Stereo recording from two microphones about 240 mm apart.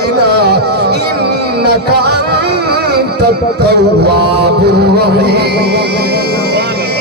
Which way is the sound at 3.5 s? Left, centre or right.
Right.